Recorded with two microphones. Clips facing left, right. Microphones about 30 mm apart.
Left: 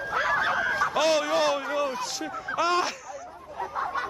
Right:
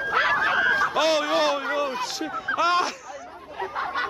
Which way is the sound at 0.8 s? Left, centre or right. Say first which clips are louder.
Right 2 dB; centre.